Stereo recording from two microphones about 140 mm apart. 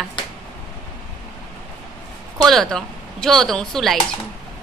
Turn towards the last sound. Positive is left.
turn(degrees=0)  # may be behind; listen again after turning